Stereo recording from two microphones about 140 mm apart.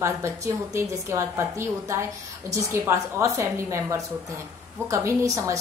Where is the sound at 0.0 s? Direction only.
20° right (ahead or behind).